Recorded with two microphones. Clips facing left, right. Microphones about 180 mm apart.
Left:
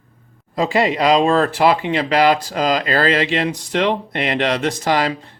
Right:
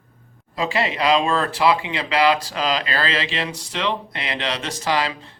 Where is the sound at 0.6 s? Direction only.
35° left (ahead or behind).